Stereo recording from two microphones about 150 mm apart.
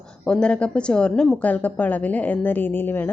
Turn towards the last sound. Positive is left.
turn(degrees=15)  # may be behind; listen again after turning